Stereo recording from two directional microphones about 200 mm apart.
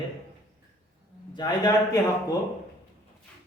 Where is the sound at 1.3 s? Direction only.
20° left (ahead or behind).